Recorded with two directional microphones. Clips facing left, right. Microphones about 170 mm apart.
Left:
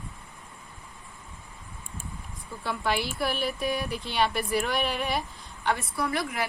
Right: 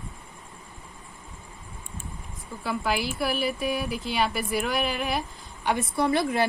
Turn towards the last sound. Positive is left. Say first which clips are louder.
# right 6 dB
turn(degrees=-30)  # may be behind; listen again after turning